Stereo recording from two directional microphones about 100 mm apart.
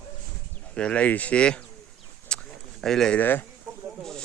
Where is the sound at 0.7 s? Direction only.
10° left (ahead or behind).